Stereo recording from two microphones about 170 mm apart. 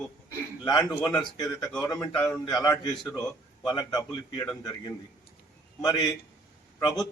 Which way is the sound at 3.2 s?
25° left (ahead or behind).